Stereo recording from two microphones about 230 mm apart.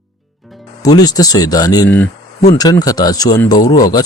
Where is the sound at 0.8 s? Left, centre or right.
Centre.